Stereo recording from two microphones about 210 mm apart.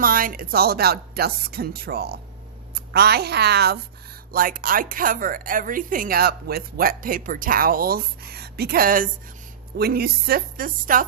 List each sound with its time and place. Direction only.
0.0 s a woman's voice: 40° right (ahead or behind)